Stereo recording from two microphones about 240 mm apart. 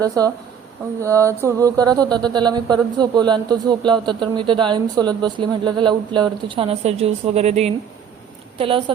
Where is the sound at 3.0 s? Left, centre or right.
Centre.